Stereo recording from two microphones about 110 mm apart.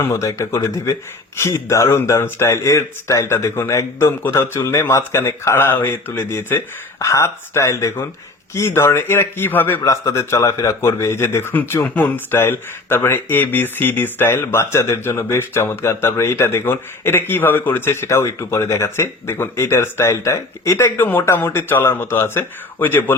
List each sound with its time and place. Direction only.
0.0 s speech: 25° left (ahead or behind)
9.8 s speech: 30° left (ahead or behind)